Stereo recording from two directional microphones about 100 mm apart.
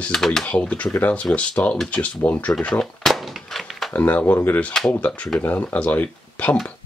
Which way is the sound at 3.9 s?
20° left (ahead or behind).